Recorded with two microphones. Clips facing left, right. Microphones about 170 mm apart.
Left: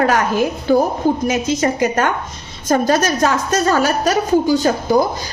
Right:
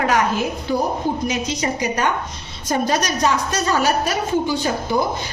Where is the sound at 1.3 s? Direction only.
50° left (ahead or behind).